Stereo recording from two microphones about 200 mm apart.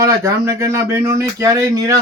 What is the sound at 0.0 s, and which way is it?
Speech, 15° right (ahead or behind).